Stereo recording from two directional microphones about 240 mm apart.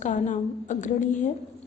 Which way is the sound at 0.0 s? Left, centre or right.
Left.